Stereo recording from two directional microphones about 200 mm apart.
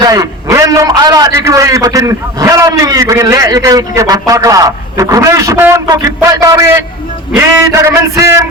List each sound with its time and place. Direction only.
0.0 s a man's voice: 20° right (ahead or behind)